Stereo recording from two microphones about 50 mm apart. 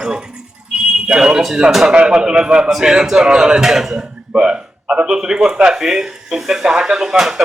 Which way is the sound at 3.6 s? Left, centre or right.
Centre.